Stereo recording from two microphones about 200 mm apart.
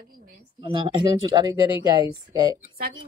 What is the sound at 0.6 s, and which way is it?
Speech, 25° right (ahead or behind).